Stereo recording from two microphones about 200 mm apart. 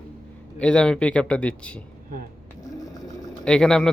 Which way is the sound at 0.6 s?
5° left (ahead or behind).